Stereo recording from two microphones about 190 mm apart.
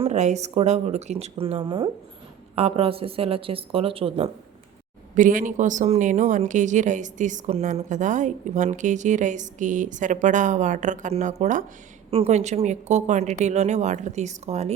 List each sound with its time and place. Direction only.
0.0 s speech: 35° right (ahead or behind)
5.1 s speech: 45° right (ahead or behind)